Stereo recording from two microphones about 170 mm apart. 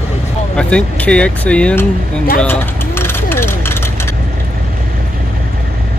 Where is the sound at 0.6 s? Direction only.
5° left (ahead or behind).